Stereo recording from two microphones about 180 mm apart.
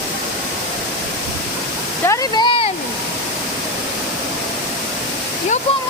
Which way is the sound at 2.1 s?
25° left (ahead or behind).